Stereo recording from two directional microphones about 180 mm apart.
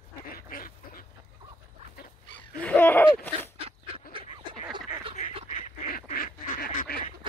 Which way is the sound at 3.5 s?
30° right (ahead or behind).